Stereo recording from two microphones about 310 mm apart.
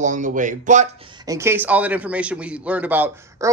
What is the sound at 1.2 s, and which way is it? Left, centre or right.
A man's voice, centre.